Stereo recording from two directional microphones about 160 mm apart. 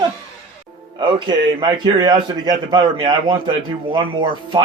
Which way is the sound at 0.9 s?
30° right (ahead or behind).